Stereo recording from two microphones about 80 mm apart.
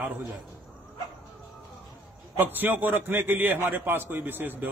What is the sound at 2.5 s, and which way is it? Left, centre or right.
A man's voice, right.